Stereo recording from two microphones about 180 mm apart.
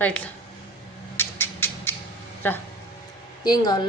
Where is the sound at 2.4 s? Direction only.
10° left (ahead or behind).